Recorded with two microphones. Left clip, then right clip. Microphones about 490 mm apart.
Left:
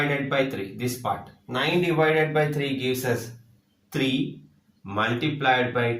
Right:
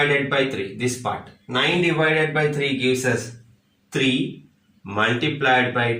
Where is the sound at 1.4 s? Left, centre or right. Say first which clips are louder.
Right 4 dB; left.